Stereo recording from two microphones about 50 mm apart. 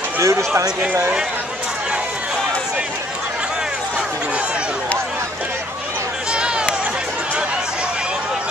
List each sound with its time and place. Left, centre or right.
0.2 s speech: right